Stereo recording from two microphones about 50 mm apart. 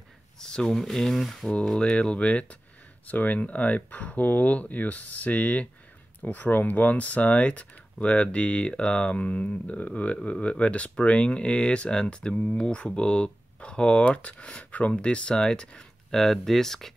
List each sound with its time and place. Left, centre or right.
0.4 s speech: centre
1.8 s speech: left